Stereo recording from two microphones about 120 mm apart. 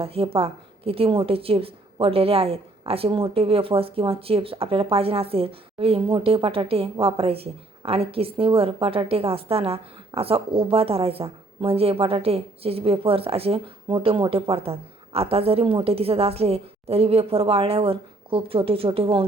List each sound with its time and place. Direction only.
0.0 s a woman's voice: 55° right (ahead or behind)